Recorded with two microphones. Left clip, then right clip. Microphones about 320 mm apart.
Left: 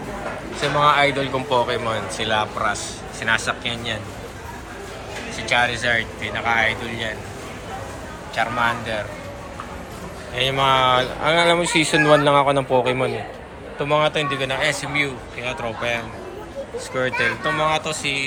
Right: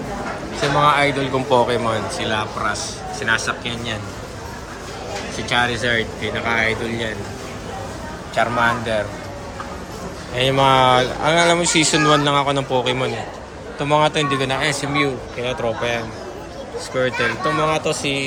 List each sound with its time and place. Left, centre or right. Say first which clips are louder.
0.6 s a man's voice: right 1 dB; centre
5.5 s speech: even; centre
5.9 s speech: right 1 dB; left
8.4 s speech: right 3 dB; centre
10.3 s a man's voice: right 3 dB; centre